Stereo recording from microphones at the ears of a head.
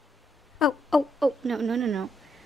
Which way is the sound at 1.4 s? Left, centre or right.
Right.